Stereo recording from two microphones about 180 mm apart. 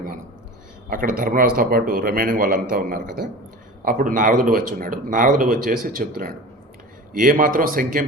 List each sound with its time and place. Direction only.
0.9 s speech: 50° right (ahead or behind)